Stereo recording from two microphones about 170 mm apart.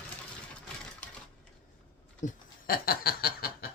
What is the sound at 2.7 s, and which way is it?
Snicker, 60° left (ahead or behind).